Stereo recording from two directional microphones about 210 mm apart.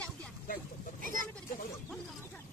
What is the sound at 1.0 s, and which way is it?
Speech, 40° right (ahead or behind).